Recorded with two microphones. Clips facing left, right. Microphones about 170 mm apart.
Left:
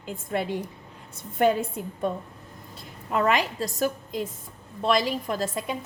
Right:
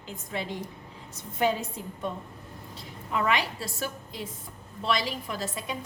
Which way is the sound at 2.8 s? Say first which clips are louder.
Left 4 dB; 45° left (ahead or behind).